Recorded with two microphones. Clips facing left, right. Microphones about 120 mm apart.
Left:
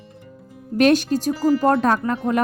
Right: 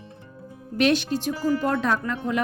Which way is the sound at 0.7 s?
45° left (ahead or behind).